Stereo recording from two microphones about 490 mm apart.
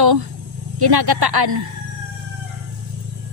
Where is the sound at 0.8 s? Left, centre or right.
Right.